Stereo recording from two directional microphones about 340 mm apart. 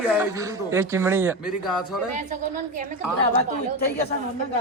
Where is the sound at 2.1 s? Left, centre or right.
Right.